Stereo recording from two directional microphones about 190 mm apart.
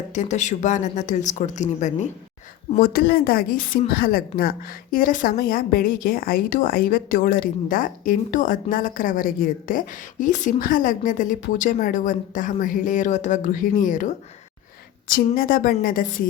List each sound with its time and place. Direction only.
0.1 s speech: 40° left (ahead or behind)
2.7 s a woman's voice: 50° left (ahead or behind)